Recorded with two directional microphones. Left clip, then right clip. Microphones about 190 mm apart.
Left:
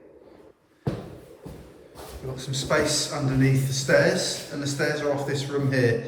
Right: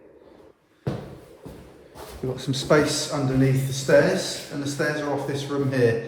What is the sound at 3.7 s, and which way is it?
A man's voice, 10° right (ahead or behind).